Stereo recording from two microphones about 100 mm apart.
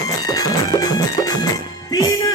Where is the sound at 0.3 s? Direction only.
35° left (ahead or behind).